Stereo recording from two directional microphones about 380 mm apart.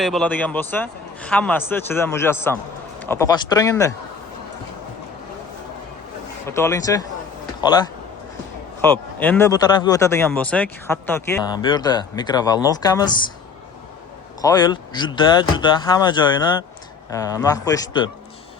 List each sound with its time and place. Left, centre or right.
0.0 s a man's voice: centre
6.5 s speech: centre
14.4 s speech: centre